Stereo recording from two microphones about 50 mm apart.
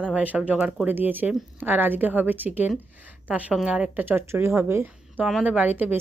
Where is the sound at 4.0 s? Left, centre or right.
Right.